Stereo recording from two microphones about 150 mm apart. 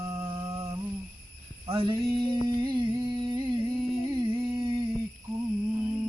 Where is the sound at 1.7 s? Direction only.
35° right (ahead or behind).